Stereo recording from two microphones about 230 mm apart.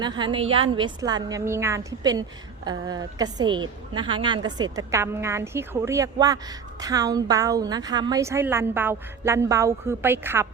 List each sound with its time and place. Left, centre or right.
0.0 s a woman's voice: centre